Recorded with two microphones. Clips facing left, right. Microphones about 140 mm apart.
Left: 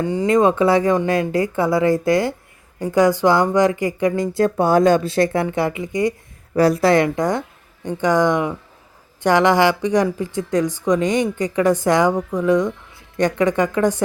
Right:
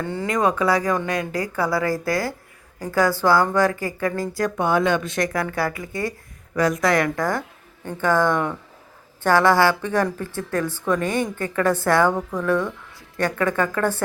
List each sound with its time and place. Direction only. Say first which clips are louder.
0.0 s speech: left 6 dB; 15° left (ahead or behind)
0.3 s speech: left 5 dB; 25° left (ahead or behind)
6.5 s speech: left 5 dB; 35° left (ahead or behind); by 14.0 s 15° left (ahead or behind)